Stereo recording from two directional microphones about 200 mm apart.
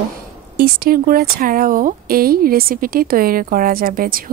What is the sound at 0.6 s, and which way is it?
Speech, 50° right (ahead or behind).